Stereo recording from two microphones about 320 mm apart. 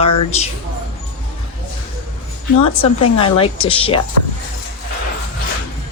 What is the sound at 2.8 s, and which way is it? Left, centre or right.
Speech, centre.